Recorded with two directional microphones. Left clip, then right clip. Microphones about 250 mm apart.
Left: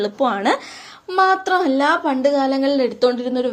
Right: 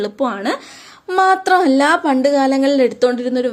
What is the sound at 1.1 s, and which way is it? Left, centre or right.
Speech, right.